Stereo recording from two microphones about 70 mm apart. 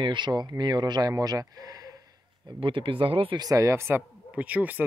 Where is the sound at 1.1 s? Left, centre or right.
Right.